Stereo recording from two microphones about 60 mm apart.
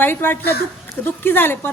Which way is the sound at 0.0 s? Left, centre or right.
Left.